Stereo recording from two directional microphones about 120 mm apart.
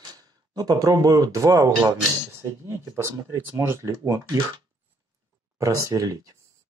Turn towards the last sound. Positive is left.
turn(degrees=-30)  # may be behind; listen again after turning